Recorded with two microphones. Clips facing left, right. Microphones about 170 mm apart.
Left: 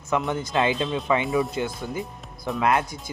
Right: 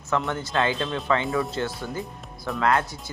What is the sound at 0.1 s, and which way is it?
Speech, 15° left (ahead or behind).